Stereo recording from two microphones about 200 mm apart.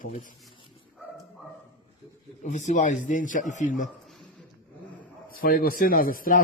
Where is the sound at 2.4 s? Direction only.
35° left (ahead or behind).